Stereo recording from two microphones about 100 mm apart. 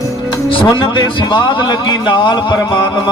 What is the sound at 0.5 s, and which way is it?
Speech, 60° left (ahead or behind).